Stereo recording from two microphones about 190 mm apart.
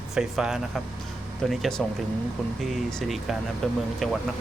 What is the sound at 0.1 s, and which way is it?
Speech, 5° right (ahead or behind).